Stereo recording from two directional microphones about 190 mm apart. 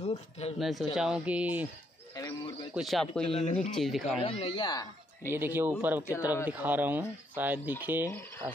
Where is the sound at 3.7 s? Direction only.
Centre (ahead or behind).